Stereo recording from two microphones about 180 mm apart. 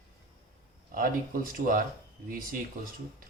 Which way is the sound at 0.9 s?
50° right (ahead or behind).